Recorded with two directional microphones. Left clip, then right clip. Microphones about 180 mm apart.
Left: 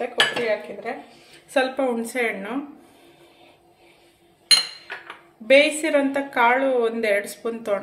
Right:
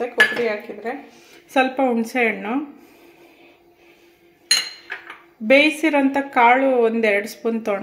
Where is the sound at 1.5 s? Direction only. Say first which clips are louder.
Right 3 dB; 40° right (ahead or behind).